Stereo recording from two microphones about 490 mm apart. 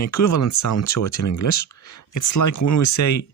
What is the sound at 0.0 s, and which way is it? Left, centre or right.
Speech, left.